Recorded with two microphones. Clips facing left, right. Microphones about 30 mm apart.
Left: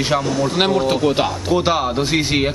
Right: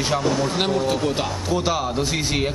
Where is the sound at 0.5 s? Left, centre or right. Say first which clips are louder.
Left 4 dB; centre.